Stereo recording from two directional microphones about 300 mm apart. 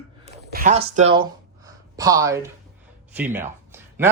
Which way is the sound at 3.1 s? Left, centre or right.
Centre.